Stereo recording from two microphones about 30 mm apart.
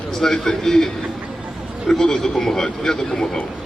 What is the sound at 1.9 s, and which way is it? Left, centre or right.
A man's voice, left.